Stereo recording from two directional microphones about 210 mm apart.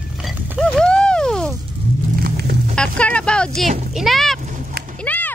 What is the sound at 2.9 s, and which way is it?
Speech, 5° left (ahead or behind).